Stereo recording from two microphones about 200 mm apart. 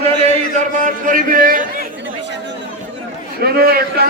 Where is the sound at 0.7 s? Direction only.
40° right (ahead or behind).